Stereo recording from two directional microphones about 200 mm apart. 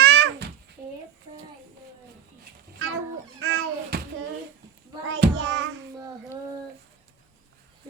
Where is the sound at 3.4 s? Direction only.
60° right (ahead or behind).